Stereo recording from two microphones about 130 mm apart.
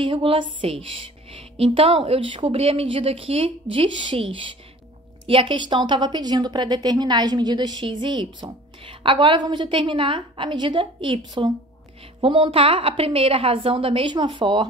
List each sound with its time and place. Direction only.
0.0 s a woman's voice: 40° right (ahead or behind)